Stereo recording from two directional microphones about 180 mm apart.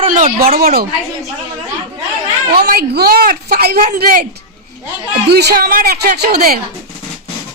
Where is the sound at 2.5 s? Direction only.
55° right (ahead or behind).